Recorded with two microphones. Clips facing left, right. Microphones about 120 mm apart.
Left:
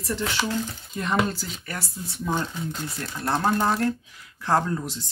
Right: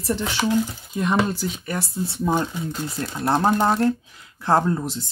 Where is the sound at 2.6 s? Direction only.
Centre (ahead or behind).